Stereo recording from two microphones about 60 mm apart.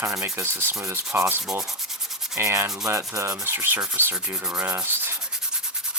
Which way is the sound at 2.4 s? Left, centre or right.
Right.